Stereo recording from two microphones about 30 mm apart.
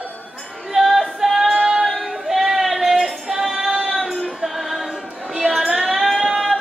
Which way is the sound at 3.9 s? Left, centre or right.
Centre.